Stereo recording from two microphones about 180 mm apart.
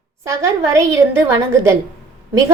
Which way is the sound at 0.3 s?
15° right (ahead or behind).